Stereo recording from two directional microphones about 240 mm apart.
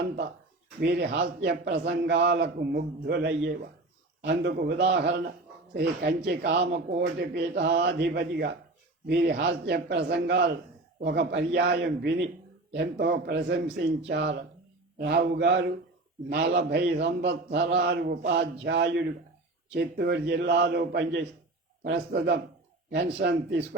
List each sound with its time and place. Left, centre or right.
0.8 s a man's voice: right